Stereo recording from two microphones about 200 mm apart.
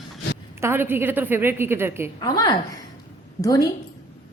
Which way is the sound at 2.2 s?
20° left (ahead or behind).